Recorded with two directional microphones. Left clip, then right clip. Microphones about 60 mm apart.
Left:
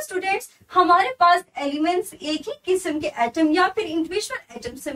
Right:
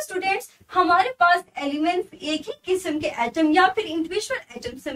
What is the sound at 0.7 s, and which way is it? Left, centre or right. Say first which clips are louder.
A woman's voice: left 2 dB; centre.